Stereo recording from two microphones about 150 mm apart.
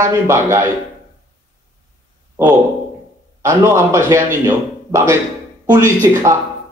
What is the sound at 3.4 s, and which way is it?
Speech, 15° right (ahead or behind).